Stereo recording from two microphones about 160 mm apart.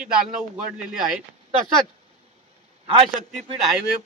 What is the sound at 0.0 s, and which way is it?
Speech, 5° right (ahead or behind).